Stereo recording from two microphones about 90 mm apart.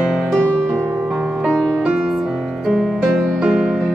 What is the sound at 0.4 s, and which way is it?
Music, 10° left (ahead or behind).